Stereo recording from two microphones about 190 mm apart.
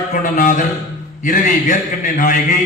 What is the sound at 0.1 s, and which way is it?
A man's voice, 45° left (ahead or behind).